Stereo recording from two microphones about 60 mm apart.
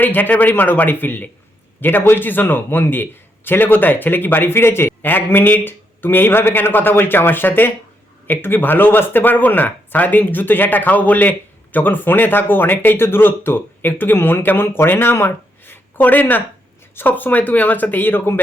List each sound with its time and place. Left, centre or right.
0.0 s speech: left